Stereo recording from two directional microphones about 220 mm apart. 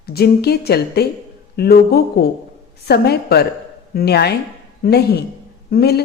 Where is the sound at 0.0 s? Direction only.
45° left (ahead or behind).